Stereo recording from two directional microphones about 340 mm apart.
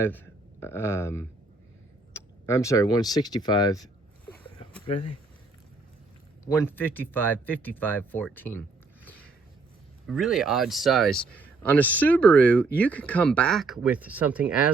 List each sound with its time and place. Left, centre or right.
0.0 s speech: centre
4.9 s speech: centre
6.4 s speech: centre
10.1 s speech: centre